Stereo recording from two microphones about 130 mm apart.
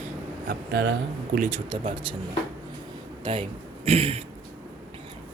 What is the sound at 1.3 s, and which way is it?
Speech, 90° right.